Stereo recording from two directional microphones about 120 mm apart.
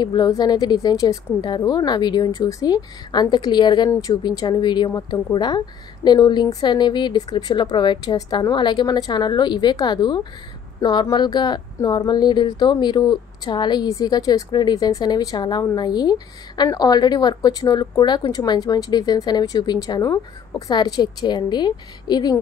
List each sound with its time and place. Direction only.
0.0 s speech: 35° left (ahead or behind)